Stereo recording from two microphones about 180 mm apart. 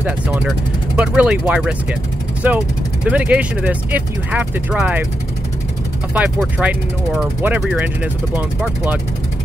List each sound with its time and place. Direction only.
0.0 s speech: 10° right (ahead or behind)
6.1 s speech: 5° right (ahead or behind)